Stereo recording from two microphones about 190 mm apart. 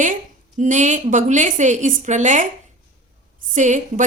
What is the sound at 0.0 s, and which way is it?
A woman's voice, 40° right (ahead or behind).